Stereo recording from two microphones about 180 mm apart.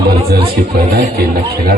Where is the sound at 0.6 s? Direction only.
60° right (ahead or behind).